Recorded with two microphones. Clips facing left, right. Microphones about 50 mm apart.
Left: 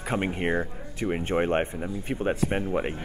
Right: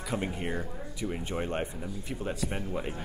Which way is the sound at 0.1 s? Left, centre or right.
Left.